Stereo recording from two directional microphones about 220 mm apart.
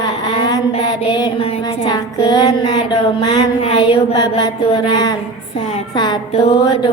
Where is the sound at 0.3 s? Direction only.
20° left (ahead or behind).